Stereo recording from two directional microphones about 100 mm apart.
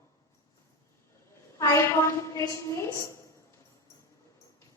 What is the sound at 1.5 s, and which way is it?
A woman's voice, 30° left (ahead or behind).